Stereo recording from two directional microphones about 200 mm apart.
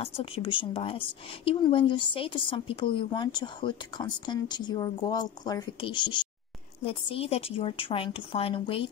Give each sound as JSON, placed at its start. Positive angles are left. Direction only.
{"t": 0.0, "sound": "speech", "side_deg": 30}